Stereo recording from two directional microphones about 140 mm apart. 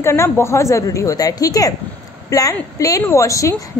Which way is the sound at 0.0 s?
20° left (ahead or behind).